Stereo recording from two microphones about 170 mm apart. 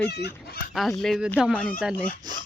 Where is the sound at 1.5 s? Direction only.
5° left (ahead or behind).